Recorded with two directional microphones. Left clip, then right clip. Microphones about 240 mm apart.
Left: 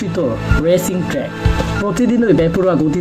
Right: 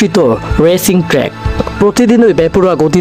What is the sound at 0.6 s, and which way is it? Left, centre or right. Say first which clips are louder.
Speech: right 5 dB; right.